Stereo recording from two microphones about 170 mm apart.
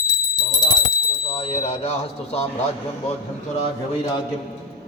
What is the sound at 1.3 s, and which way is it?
A man's voice, 35° left (ahead or behind).